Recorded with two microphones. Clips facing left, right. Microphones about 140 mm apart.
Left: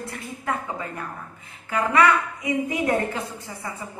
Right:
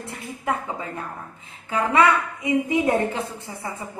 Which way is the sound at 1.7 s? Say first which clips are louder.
Right 1 dB; 25° right (ahead or behind).